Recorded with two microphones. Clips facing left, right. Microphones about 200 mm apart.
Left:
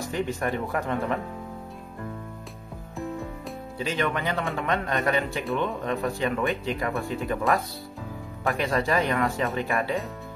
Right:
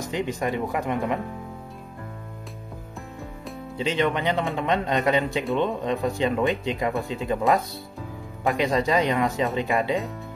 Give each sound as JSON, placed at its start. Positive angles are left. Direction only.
{"t": 0.0, "sound": "speech", "side_deg": -15}
{"t": 3.7, "sound": "speech", "side_deg": -25}
{"t": 8.5, "sound": "speech", "side_deg": -20}